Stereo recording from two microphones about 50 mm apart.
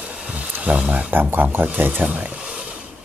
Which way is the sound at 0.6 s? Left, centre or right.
Right.